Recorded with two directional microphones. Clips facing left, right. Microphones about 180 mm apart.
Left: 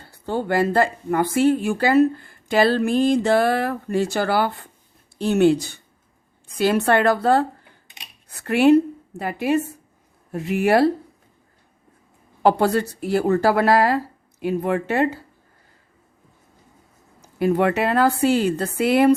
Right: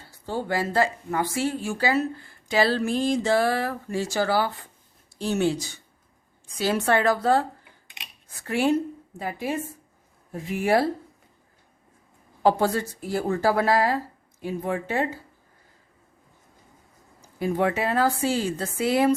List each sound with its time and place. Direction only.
0.1 s a woman's voice: 60° left (ahead or behind)
12.4 s speech: 65° left (ahead or behind)
17.2 s speech: 70° left (ahead or behind)